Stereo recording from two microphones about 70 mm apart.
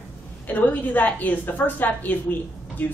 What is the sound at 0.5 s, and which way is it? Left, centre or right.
A woman's voice, left.